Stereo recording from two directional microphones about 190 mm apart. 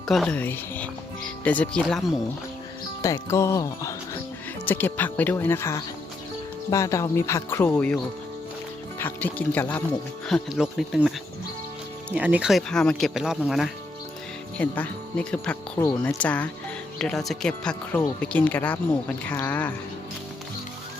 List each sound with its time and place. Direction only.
0.1 s speech: 5° left (ahead or behind)
3.0 s speech: 15° left (ahead or behind)
9.0 s speech: 10° left (ahead or behind)
12.1 s speech: 5° right (ahead or behind)